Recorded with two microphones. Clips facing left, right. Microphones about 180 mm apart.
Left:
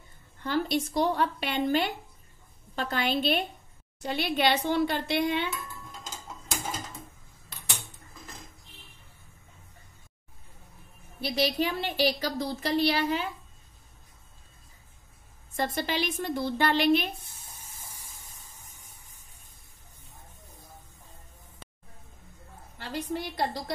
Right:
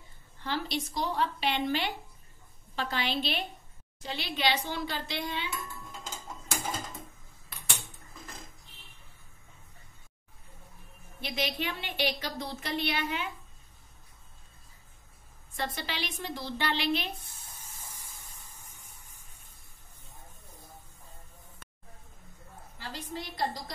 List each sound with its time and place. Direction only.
0.4 s a woman's voice: 50° left (ahead or behind)
11.1 s a woman's voice: 35° left (ahead or behind)
15.5 s a woman's voice: 45° left (ahead or behind)
22.8 s a woman's voice: 65° left (ahead or behind)